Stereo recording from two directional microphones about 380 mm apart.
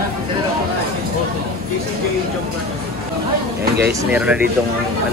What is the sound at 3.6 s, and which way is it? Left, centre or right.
Speech, right.